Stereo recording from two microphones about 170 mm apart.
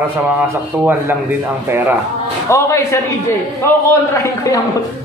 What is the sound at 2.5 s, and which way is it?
A man's voice, 15° left (ahead or behind).